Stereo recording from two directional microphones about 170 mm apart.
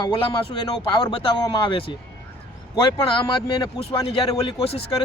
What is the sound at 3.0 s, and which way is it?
Speech, 30° left (ahead or behind).